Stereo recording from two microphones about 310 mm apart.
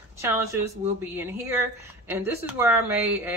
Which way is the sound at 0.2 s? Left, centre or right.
Centre.